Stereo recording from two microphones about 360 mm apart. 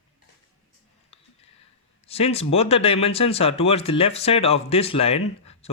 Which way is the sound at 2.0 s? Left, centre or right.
Centre.